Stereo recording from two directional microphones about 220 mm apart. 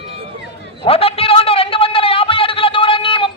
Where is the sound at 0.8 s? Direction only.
25° left (ahead or behind).